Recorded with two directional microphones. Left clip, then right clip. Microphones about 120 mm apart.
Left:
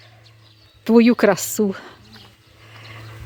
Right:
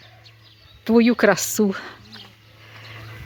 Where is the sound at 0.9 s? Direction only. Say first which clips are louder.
Left 3 dB; 60° left (ahead or behind).